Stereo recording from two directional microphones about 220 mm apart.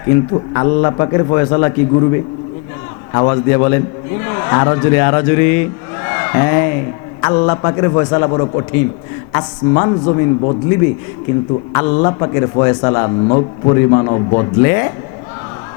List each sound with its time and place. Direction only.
0.1 s a man's voice: 20° left (ahead or behind)
3.1 s a man's voice: 20° left (ahead or behind)
11.7 s a man's voice: 15° left (ahead or behind)
14.6 s speech: 15° left (ahead or behind)